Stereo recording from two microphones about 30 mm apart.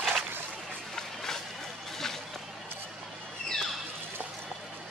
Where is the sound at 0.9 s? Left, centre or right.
Centre.